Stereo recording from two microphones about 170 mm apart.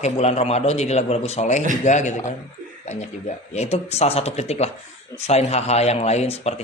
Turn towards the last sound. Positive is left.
turn(degrees=40)  # may be behind; listen again after turning